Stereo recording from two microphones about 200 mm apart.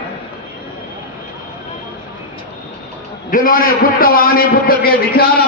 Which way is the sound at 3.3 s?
45° left (ahead or behind).